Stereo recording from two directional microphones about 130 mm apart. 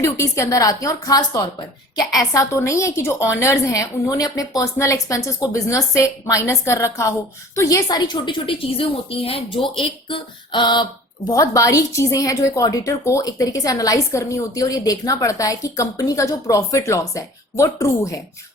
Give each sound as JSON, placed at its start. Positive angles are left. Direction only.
{"t": 0.0, "sound": "a woman's voice", "side_deg": 25}
{"t": 11.3, "sound": "a woman's voice", "side_deg": 25}